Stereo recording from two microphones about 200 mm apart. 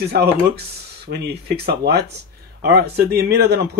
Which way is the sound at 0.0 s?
55° right (ahead or behind).